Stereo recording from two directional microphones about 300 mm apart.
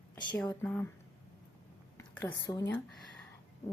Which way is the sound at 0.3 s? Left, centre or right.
Centre.